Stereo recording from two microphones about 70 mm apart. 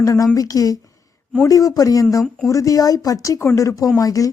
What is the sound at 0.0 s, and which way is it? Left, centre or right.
Speech, left.